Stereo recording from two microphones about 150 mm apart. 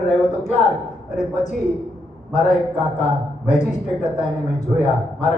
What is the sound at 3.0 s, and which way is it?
A woman's voice, 55° left (ahead or behind).